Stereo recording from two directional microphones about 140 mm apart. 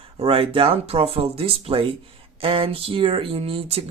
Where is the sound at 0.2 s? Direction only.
40° right (ahead or behind).